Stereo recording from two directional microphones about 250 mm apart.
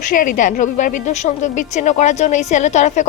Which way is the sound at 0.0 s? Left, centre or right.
Left.